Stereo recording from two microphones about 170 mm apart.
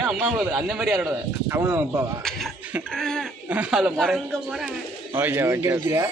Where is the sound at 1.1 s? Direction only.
15° right (ahead or behind).